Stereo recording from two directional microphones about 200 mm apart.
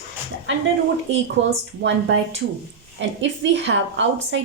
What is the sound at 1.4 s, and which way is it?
Speech, 65° right (ahead or behind).